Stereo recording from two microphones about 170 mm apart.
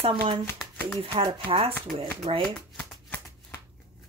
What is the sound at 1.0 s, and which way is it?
Speech, 30° right (ahead or behind).